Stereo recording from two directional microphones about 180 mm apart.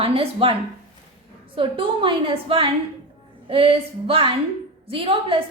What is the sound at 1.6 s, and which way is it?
A woman's voice, 30° right (ahead or behind).